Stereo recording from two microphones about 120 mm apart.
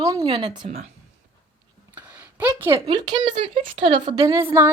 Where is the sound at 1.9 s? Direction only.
15° right (ahead or behind).